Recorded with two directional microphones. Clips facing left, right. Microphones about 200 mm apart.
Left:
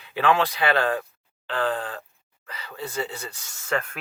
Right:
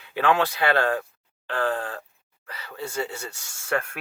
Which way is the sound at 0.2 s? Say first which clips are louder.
Even; 50° right (ahead or behind).